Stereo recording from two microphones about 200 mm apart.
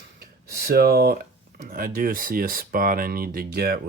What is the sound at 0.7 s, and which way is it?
Speech, 50° right (ahead or behind).